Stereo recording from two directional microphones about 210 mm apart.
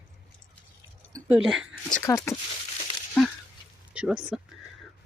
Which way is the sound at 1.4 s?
Centre (ahead or behind).